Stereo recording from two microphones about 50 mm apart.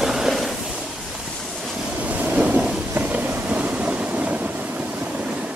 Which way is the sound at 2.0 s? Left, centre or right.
Right.